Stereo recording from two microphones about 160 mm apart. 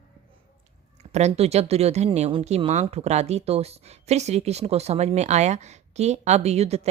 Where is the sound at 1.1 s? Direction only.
45° right (ahead or behind).